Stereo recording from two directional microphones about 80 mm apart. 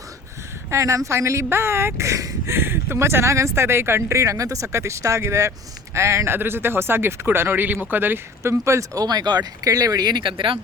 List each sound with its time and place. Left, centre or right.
0.7 s speech: right
2.6 s speech: right